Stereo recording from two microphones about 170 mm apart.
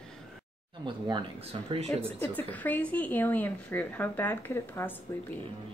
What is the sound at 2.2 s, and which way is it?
A woman's voice, 10° left (ahead or behind).